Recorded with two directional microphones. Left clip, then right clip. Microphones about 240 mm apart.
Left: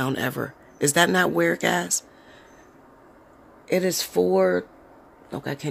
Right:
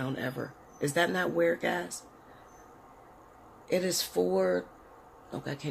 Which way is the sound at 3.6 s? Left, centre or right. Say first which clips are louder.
Left 6 dB; left.